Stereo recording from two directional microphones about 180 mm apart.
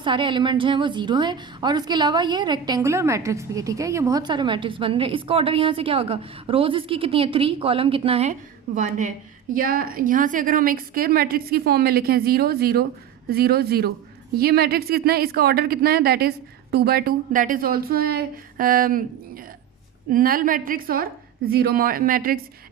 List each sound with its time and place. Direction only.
0.0 s a woman's voice: 25° right (ahead or behind); by 19.0 s 50° right (ahead or behind)
20.1 s a woman's voice: 50° right (ahead or behind)